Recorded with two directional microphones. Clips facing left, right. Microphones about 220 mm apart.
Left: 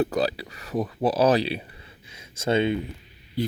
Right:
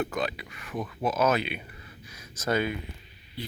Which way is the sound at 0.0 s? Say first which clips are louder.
Left 6 dB; 35° left (ahead or behind).